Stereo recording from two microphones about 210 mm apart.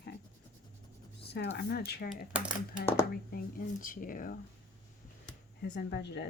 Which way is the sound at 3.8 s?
40° left (ahead or behind).